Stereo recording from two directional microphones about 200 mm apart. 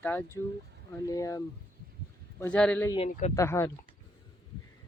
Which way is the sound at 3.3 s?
15° left (ahead or behind).